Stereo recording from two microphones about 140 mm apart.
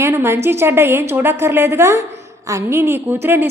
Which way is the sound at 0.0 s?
15° right (ahead or behind).